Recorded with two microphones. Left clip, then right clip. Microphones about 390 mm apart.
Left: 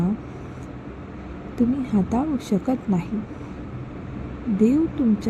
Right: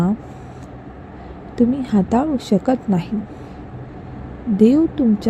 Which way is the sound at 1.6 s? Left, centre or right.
Centre.